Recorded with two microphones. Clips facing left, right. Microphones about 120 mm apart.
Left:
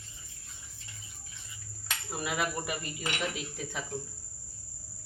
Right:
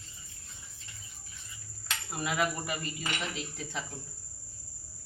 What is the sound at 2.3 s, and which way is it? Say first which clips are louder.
Speech: right 2 dB; 15° left (ahead or behind).